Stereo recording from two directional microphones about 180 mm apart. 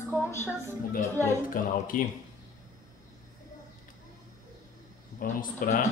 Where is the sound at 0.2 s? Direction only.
15° left (ahead or behind).